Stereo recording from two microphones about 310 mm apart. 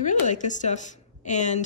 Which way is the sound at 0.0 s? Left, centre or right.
Left.